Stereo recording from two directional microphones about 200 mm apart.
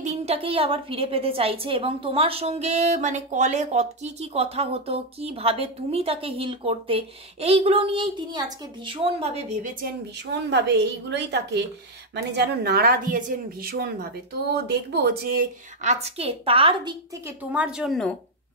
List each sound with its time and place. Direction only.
0.0 s a woman's voice: 35° right (ahead or behind)
10.5 s a woman's voice: 60° right (ahead or behind); by 16.9 s 25° right (ahead or behind)
17.4 s a woman's voice: 5° right (ahead or behind)